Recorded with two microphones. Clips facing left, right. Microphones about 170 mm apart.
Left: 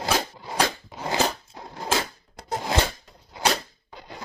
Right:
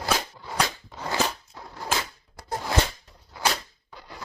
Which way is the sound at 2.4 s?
20° left (ahead or behind).